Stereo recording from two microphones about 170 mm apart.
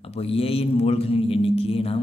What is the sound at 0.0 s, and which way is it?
Speech, 35° left (ahead or behind).